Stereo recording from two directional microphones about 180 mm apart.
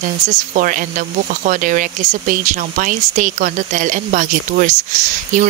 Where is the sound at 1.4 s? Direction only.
45° right (ahead or behind).